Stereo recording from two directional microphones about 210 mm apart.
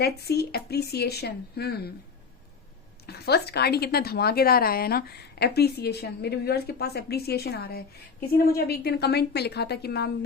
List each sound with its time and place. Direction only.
0.0 s a woman's voice: 50° left (ahead or behind)
3.1 s a woman's voice: 50° left (ahead or behind)